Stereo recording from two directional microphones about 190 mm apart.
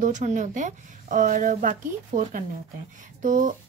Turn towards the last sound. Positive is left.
turn(degrees=-40)  # may be behind; listen again after turning